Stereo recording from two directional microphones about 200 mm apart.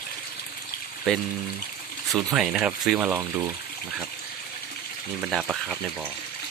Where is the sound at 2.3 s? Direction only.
5° right (ahead or behind).